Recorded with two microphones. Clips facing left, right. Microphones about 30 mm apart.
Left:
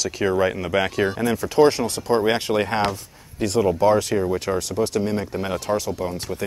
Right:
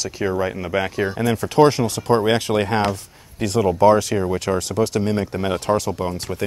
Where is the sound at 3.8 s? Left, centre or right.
Right.